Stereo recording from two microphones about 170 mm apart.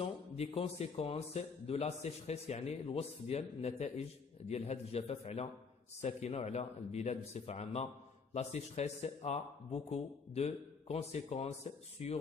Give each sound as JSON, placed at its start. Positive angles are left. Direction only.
{"t": 0.0, "sound": "a man's voice", "side_deg": 35}